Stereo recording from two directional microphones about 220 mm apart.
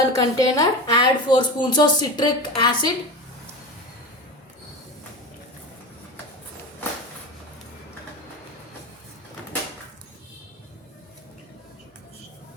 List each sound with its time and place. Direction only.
0.1 s speech: 15° left (ahead or behind)